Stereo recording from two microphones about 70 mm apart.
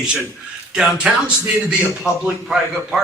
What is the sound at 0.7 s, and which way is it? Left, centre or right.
Speech, centre.